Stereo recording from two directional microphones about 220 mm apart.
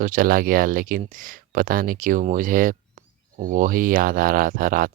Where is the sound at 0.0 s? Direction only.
40° right (ahead or behind).